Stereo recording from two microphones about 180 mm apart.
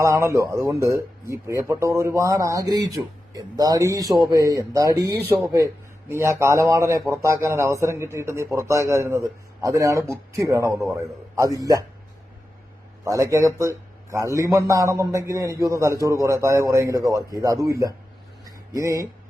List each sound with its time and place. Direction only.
0.0 s speech: 15° right (ahead or behind)
13.1 s a man's voice: 15° right (ahead or behind)
18.4 s a sound: 20° right (ahead or behind)